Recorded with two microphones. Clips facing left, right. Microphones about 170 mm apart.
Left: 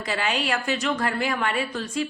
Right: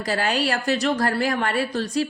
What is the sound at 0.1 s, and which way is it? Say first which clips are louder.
A woman's voice: right 3 dB; 40° right (ahead or behind).